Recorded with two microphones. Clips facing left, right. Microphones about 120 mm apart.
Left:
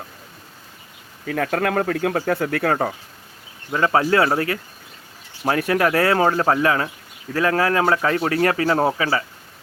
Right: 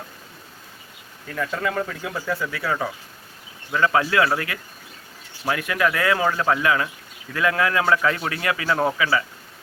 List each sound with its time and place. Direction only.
1.3 s speech: 70° left (ahead or behind); by 2.9 s 50° left (ahead or behind)
3.7 s speech: 35° left (ahead or behind)